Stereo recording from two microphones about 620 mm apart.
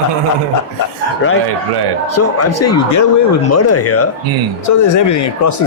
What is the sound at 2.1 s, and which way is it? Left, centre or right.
Speech, left.